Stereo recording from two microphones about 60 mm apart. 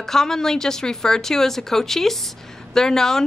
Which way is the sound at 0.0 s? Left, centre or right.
Centre.